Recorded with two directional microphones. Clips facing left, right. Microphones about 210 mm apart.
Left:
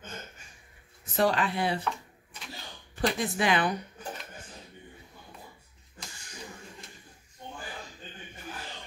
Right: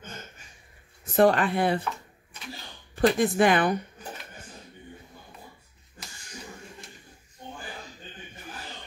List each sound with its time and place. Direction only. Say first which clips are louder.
1.1 s speech: right 6 dB; 55° right (ahead or behind)
3.0 s speech: right 7 dB; 50° right (ahead or behind)